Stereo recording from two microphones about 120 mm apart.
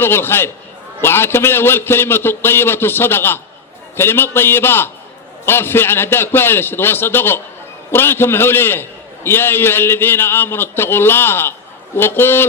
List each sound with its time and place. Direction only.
0.0 s a man's voice: 20° left (ahead or behind)